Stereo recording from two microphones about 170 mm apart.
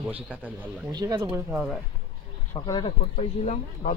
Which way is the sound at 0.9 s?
25° right (ahead or behind).